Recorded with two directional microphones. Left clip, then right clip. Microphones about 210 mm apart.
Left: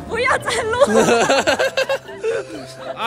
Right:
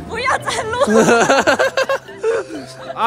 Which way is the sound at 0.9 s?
35° right (ahead or behind).